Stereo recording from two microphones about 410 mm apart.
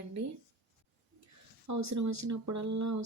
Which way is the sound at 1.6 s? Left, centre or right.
Right.